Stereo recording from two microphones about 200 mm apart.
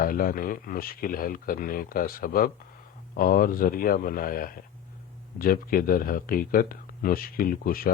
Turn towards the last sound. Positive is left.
turn(degrees=45)  # may be behind; listen again after turning